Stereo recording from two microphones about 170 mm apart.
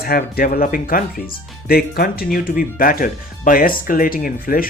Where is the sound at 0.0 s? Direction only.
60° left (ahead or behind).